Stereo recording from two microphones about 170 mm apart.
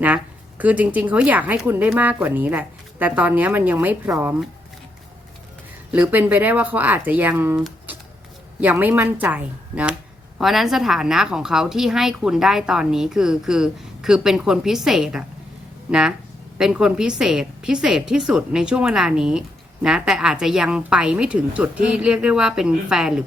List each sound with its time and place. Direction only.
0.6 s speech: 10° right (ahead or behind)
5.9 s speech: 10° right (ahead or behind)
8.6 s a woman's voice: 10° right (ahead or behind)